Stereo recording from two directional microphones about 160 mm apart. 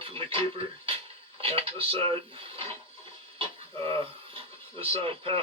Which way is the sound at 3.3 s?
35° right (ahead or behind).